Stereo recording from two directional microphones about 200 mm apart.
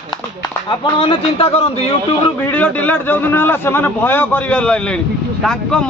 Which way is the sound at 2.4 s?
5° left (ahead or behind).